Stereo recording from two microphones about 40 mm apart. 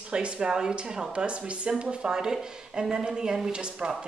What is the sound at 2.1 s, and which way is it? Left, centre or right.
Speech, centre.